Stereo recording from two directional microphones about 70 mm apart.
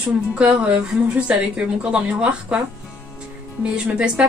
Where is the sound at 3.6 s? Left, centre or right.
Centre.